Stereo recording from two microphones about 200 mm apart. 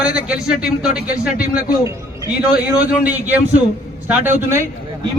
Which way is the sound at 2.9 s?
10° right (ahead or behind).